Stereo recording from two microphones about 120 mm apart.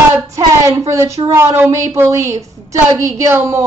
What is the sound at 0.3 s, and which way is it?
A woman's voice, 25° right (ahead or behind).